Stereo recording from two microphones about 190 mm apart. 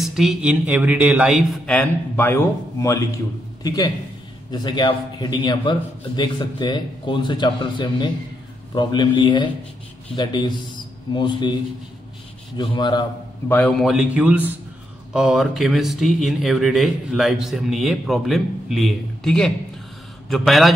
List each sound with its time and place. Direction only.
0.0 s a man's voice: centre (ahead or behind); by 11.5 s 25° left (ahead or behind)
12.5 s a man's voice: 20° left (ahead or behind)
13.5 s speech: 5° left (ahead or behind)